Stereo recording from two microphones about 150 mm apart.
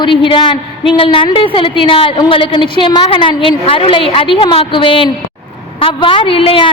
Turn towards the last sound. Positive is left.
turn(degrees=35)  # may be behind; listen again after turning